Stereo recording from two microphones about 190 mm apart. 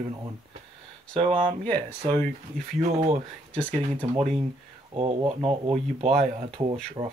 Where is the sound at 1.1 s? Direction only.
30° right (ahead or behind).